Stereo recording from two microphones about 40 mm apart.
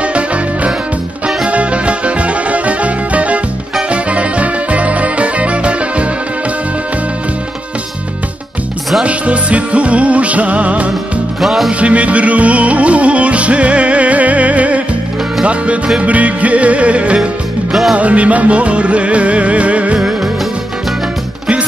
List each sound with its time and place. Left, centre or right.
0.0 s music: right
9.0 s music: right
11.4 s music: centre
11.8 s music: right